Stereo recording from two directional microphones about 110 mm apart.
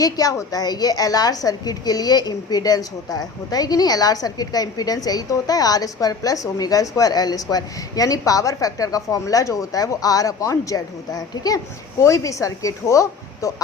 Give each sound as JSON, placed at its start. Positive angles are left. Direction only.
{"t": 0.0, "sound": "a woman's voice", "side_deg": 35}